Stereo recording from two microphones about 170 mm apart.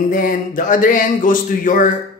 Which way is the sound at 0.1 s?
55° left (ahead or behind).